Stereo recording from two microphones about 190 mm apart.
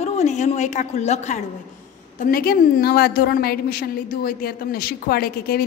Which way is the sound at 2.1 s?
45° left (ahead or behind).